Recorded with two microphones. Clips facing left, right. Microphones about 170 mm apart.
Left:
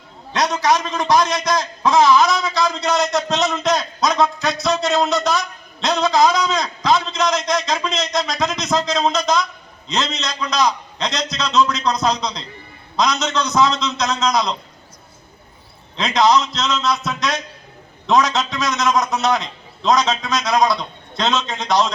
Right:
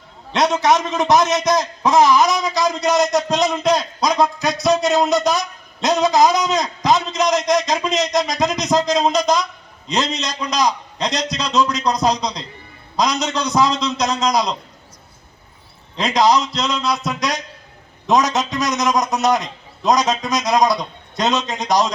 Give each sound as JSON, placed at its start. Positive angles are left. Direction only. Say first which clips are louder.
{"t": 0.3, "sound": "a man's voice", "louder": "right 2 dB", "side_deg": -25}
{"t": 11.1, "sound": "a man's voice", "louder": "right 1 dB", "side_deg": -40}
{"t": 11.8, "sound": "a man's voice", "louder": "right 1 dB", "side_deg": -15}
{"t": 16.0, "sound": "a man's voice", "louder": "even", "side_deg": -10}